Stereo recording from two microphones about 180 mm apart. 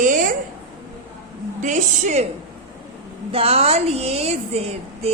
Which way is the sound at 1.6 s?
40° right (ahead or behind).